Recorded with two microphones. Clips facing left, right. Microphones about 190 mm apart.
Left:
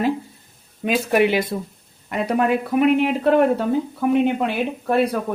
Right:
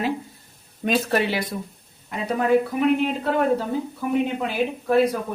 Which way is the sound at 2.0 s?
70° left (ahead or behind).